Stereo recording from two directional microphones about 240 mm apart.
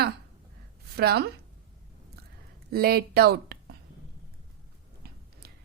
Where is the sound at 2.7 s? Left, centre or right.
Right.